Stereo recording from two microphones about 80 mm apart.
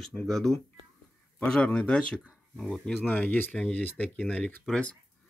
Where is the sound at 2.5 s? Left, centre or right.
Centre.